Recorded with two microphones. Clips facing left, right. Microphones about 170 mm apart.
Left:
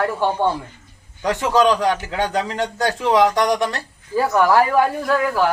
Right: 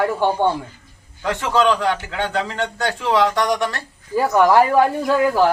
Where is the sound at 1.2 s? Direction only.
15° left (ahead or behind).